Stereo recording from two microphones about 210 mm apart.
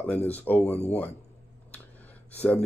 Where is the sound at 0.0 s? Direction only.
5° left (ahead or behind).